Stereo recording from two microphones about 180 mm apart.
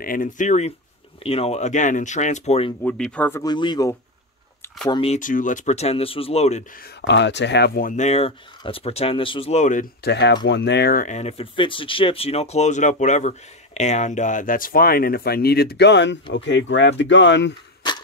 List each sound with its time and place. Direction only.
0.0 s speech: 50° left (ahead or behind)
2.8 s speech: 5° left (ahead or behind); by 5.1 s 25° left (ahead or behind)
5.1 s speech: 45° left (ahead or behind)
7.1 s speech: 80° left; by 9.8 s 45° left (ahead or behind)
10.0 s speech: 75° left (ahead or behind)
16.3 s speech: 90° left